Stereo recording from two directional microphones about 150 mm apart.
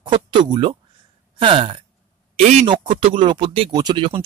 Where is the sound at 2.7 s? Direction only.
30° right (ahead or behind).